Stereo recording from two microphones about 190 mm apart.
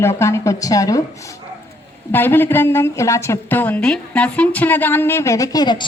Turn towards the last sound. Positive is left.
turn(degrees=25)  # may be behind; listen again after turning